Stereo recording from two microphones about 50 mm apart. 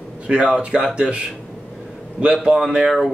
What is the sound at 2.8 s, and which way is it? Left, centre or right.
Speech, centre.